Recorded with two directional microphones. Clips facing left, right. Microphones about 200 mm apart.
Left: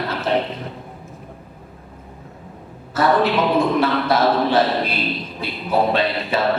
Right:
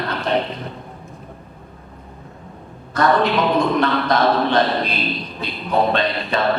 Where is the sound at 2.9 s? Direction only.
5° left (ahead or behind).